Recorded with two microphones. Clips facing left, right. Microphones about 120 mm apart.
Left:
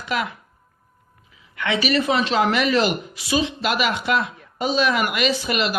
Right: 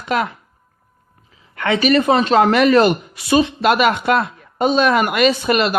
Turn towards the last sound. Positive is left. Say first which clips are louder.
# right 6 dB
turn(degrees=-55)  # may be behind; listen again after turning